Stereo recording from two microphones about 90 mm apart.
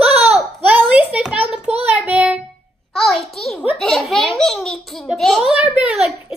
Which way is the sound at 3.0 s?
Centre (ahead or behind).